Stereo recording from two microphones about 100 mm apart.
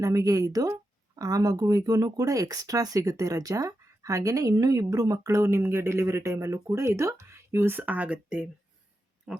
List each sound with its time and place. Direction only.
0.0 s speech: 35° right (ahead or behind); by 9.4 s 5° right (ahead or behind)